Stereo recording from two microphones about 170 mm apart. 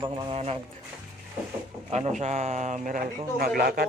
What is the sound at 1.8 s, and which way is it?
A man's voice, 35° right (ahead or behind).